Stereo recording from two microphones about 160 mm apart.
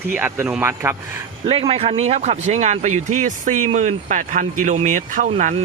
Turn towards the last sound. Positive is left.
turn(degrees=-50)  # may be behind; listen again after turning